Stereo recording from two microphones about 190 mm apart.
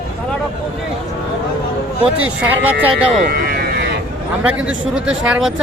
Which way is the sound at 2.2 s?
10° right (ahead or behind).